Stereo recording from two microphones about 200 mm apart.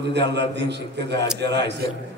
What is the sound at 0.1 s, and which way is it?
A man's voice, 60° right (ahead or behind).